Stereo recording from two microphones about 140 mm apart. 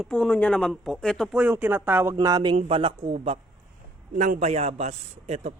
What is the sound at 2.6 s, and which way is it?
Speech, 40° right (ahead or behind).